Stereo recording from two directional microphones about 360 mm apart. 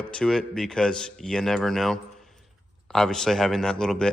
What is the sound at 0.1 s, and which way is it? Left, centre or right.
A man's voice, centre.